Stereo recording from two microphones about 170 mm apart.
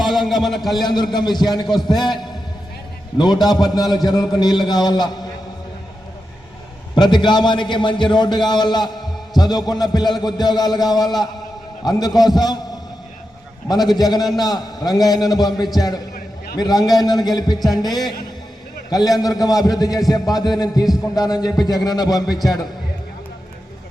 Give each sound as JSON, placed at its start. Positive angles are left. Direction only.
{"t": 0.0, "sound": "a man's voice", "side_deg": 0}
{"t": 0.8, "sound": "a man's voice", "side_deg": 25}
{"t": 6.9, "sound": "a man's voice", "side_deg": 25}
{"t": 13.7, "sound": "a man's voice", "side_deg": 25}